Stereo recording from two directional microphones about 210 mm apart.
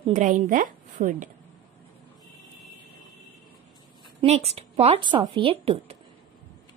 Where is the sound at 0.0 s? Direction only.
35° right (ahead or behind).